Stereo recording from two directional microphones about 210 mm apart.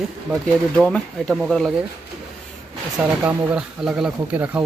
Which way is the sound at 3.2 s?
5° right (ahead or behind).